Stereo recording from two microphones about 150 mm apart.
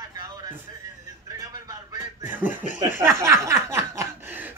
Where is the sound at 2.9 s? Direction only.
15° right (ahead or behind).